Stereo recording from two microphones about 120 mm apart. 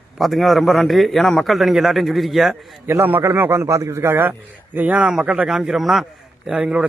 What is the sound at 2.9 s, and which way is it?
A man's voice, 20° right (ahead or behind).